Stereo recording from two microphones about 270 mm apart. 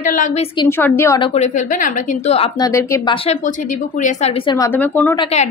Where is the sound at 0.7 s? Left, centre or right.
Centre.